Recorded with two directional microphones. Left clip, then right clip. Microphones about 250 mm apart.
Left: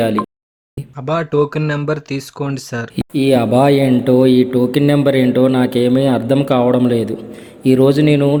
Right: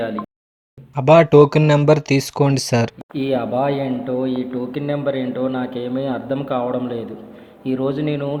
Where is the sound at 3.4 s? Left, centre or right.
Left.